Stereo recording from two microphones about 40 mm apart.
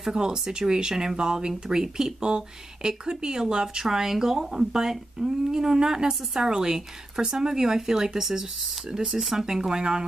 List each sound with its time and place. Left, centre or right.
0.0 s speech: centre